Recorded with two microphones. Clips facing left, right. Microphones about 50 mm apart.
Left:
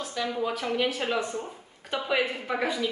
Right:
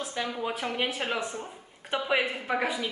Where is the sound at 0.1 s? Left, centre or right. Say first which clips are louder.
Left 5 dB; right.